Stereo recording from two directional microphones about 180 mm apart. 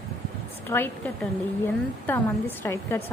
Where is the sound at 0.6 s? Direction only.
10° left (ahead or behind).